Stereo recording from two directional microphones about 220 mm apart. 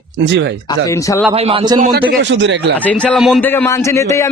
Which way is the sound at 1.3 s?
25° right (ahead or behind).